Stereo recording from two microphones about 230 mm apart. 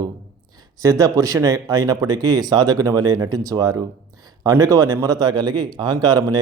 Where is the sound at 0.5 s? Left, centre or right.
Centre.